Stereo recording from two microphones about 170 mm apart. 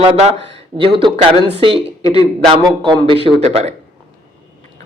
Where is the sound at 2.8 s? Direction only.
30° right (ahead or behind).